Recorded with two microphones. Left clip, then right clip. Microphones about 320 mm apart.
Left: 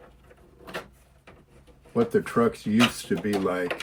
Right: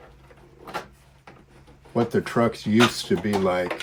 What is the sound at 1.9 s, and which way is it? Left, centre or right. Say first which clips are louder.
Speech: even; right.